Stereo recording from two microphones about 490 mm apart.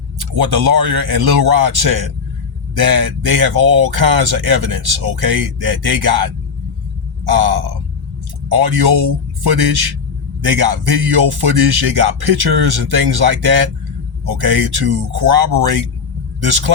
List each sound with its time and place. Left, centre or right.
0.2 s speech: right